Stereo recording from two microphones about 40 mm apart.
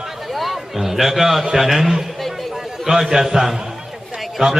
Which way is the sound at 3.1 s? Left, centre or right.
Centre.